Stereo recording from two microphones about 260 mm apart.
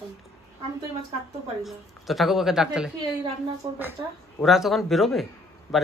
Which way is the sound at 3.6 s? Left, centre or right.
Centre.